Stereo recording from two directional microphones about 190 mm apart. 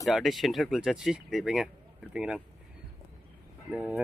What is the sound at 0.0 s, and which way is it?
Speech, centre (ahead or behind).